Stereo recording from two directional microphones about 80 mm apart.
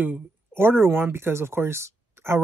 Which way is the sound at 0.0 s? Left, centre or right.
Right.